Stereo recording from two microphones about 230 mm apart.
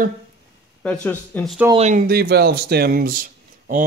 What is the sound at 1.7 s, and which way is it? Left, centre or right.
Speech, right.